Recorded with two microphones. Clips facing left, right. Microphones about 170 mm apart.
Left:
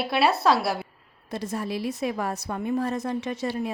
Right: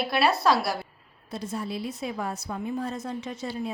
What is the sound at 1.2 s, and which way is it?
A woman's voice, 75° left (ahead or behind).